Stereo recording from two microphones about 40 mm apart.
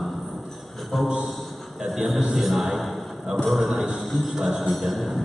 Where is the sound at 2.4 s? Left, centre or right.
Centre.